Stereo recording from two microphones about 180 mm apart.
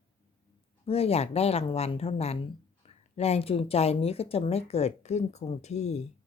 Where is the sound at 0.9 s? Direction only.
35° left (ahead or behind).